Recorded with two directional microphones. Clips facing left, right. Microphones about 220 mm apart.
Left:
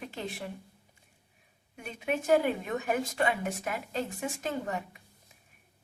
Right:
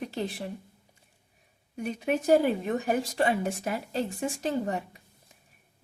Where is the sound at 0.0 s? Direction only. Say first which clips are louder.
Right 5 dB; 35° right (ahead or behind).